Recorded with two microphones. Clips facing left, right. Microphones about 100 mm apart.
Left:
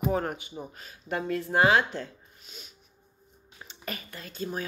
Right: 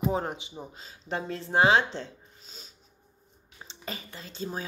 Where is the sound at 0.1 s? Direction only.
20° right (ahead or behind).